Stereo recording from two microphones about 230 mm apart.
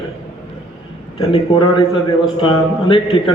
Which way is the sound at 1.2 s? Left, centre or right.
Left.